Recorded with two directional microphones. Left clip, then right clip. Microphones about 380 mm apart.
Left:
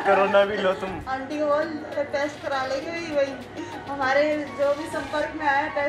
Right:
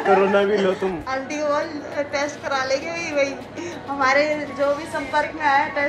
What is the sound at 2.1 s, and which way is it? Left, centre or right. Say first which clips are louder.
Chatter: right 4 dB; right.